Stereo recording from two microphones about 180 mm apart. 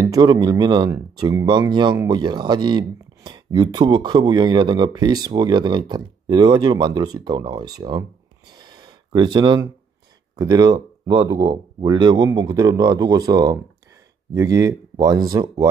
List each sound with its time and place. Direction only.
0.0 s speech: 20° right (ahead or behind)
8.5 s gasp: 25° right (ahead or behind)
10.3 s speech: 20° right (ahead or behind)